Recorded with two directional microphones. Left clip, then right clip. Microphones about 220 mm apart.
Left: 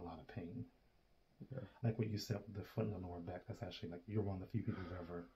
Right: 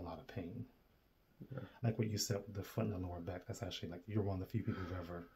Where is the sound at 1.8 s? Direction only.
45° right (ahead or behind).